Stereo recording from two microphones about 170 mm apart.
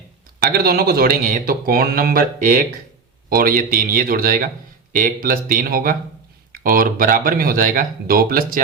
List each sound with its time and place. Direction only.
0.3 s speech: 60° right (ahead or behind)